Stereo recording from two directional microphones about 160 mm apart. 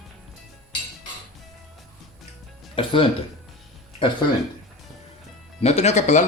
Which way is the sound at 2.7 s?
35° left (ahead or behind).